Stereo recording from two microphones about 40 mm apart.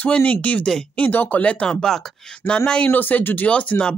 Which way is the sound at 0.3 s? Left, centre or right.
Left.